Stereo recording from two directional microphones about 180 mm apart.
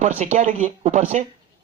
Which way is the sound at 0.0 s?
45° right (ahead or behind).